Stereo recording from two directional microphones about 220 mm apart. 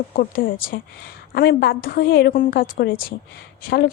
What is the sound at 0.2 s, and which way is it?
A woman's voice, 40° left (ahead or behind).